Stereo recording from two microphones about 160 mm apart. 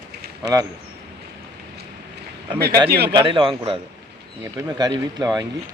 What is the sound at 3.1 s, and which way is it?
Speech, 30° right (ahead or behind).